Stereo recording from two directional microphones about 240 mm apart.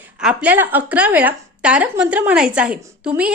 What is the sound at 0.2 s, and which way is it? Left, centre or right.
A woman's voice, centre.